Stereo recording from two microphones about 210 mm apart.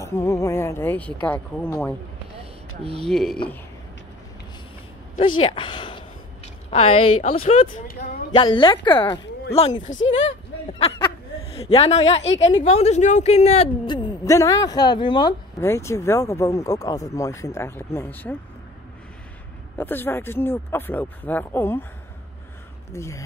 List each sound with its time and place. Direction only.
0.0 s speech: 15° left (ahead or behind)
3.0 s speech: centre (ahead or behind)
5.4 s a woman's voice: 25° left (ahead or behind)
9.9 s speech: 65° left (ahead or behind)
11.6 s a woman's voice: 30° left (ahead or behind); by 18.3 s 10° left (ahead or behind)
19.8 s speech: 10° left (ahead or behind)
22.9 s speech: 15° left (ahead or behind)